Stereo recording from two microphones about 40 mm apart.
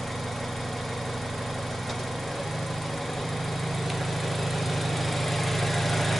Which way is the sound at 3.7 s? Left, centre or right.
Centre.